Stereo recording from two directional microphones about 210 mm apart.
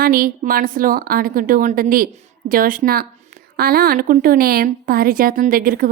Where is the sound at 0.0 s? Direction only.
45° right (ahead or behind).